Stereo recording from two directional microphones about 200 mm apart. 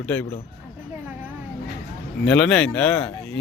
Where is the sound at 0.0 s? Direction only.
5° left (ahead or behind).